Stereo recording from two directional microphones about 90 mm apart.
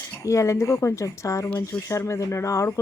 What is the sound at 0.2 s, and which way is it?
Speech, 35° left (ahead or behind).